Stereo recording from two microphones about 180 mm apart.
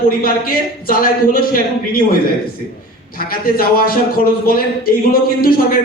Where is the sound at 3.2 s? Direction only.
55° left (ahead or behind).